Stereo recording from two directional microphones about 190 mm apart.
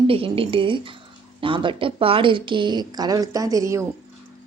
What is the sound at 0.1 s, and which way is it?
A woman's voice, 30° right (ahead or behind).